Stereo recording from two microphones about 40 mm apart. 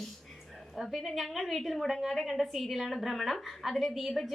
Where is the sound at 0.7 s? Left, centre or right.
Centre.